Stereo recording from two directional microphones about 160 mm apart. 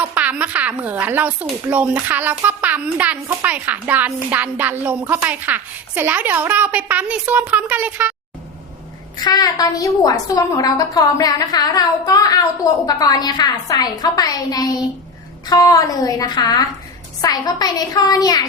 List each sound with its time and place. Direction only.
0.0 s a woman's voice: 10° right (ahead or behind)
9.1 s a woman's voice: 25° left (ahead or behind)